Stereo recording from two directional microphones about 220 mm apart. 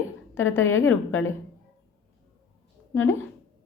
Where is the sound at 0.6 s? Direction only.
65° left (ahead or behind).